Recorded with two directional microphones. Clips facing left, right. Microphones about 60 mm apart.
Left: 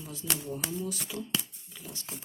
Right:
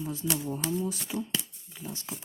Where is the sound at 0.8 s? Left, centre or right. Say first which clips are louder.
Right 3 dB; right.